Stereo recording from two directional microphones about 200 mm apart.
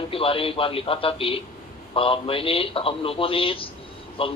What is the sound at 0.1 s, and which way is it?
A man's voice, 25° left (ahead or behind).